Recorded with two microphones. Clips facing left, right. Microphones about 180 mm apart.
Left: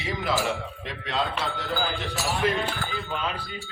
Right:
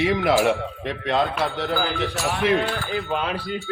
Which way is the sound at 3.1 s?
60° right (ahead or behind).